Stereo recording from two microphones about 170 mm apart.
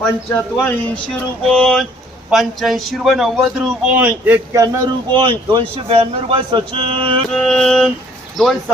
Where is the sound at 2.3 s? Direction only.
Centre (ahead or behind).